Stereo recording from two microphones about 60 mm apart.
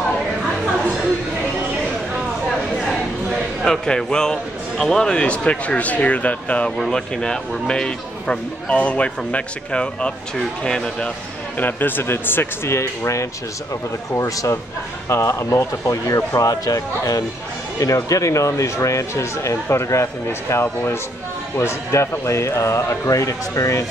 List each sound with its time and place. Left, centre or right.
3.6 s speech: centre
6.8 s speech: centre
11.6 s speech: left